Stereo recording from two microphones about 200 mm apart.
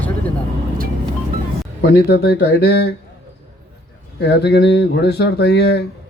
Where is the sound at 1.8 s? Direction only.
60° left (ahead or behind).